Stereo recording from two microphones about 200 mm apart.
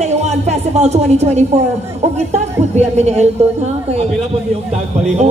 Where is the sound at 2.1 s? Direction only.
35° right (ahead or behind).